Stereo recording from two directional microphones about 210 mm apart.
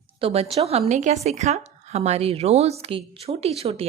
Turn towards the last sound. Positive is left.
turn(degrees=-30)  # may be behind; listen again after turning